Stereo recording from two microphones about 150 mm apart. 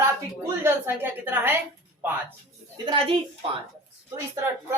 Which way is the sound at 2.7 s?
30° right (ahead or behind).